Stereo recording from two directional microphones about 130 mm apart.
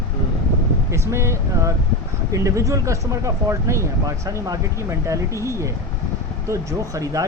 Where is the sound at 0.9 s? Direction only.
20° right (ahead or behind).